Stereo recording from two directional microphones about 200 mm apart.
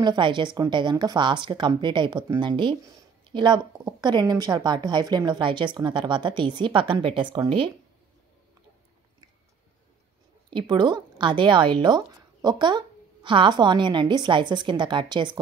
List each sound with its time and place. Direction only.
0.0 s speech: 20° right (ahead or behind)
10.7 s speech: 20° right (ahead or behind)